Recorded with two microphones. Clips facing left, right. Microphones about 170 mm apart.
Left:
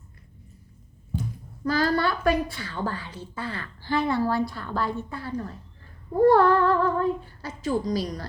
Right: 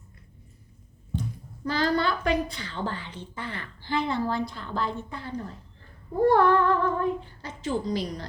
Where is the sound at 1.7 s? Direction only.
20° right (ahead or behind).